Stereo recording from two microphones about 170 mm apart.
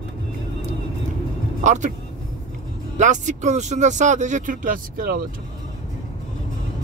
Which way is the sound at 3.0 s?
45° right (ahead or behind).